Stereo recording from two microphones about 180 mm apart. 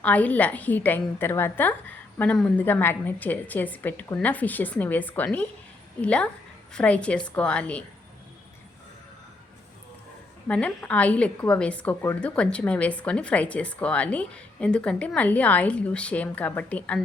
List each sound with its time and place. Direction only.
0.0 s a woman's voice: 10° left (ahead or behind)
10.5 s a woman's voice: 5° left (ahead or behind)